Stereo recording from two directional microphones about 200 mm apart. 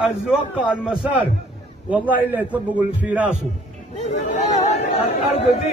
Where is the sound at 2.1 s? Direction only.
10° right (ahead or behind).